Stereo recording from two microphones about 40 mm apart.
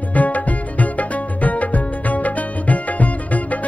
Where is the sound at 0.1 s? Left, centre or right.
Left.